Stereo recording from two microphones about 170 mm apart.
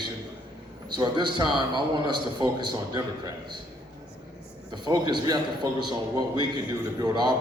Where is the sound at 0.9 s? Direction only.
25° right (ahead or behind).